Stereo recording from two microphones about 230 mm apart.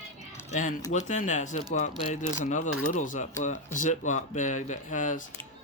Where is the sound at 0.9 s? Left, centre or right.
Left.